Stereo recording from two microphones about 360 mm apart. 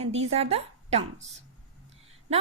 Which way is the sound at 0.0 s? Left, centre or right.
Centre.